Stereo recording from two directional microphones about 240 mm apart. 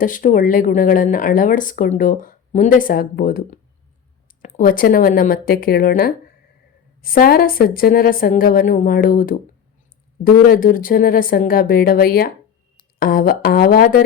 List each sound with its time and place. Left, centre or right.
0.0 s speech: left
10.5 s speech: left